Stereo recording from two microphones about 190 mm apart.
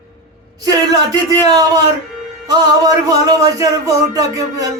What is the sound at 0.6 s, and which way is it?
A man's voice, 20° right (ahead or behind).